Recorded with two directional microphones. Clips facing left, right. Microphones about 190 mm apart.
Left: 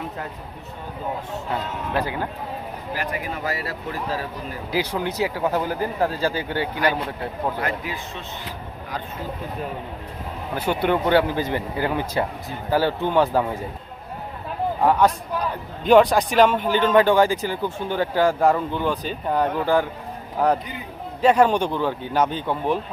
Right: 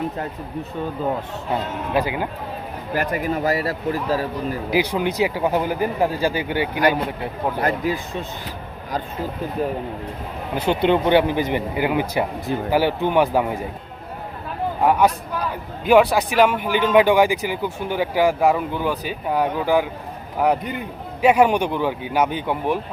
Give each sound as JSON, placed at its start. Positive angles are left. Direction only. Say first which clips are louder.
{"t": 1.9, "sound": "a man's voice", "louder": "right 3 dB", "side_deg": -10}
{"t": 2.9, "sound": "speech", "louder": "right 7 dB", "side_deg": -50}
{"t": 4.7, "sound": "a man's voice", "louder": "right 3 dB", "side_deg": -15}
{"t": 7.6, "sound": "speech", "louder": "right 6 dB", "side_deg": -40}
{"t": 10.5, "sound": "a man's voice", "louder": "right 3 dB", "side_deg": -20}
{"t": 14.8, "sound": "a man's voice", "louder": "right 1 dB", "side_deg": -10}